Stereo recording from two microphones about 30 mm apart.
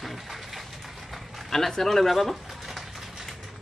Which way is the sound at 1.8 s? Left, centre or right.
Centre.